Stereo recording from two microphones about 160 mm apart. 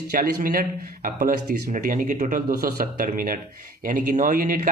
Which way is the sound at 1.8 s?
55° right (ahead or behind).